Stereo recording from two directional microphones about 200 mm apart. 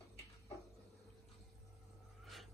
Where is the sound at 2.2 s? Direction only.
Centre (ahead or behind).